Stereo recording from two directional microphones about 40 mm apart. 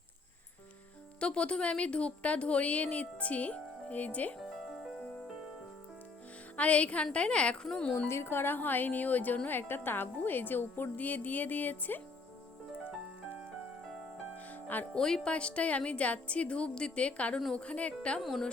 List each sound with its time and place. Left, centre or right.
1.2 s a woman's voice: left
6.6 s a woman's voice: left
7.9 s a woman's voice: left
9.5 s speech: left
14.3 s music: left
14.9 s speech: centre
15.3 s a woman's voice: left
18.2 s speech: centre